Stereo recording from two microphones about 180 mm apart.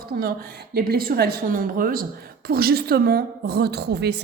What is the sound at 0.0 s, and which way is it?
A woman's voice, 55° right (ahead or behind).